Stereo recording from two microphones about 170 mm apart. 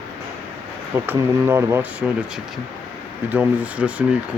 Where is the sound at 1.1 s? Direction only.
15° right (ahead or behind).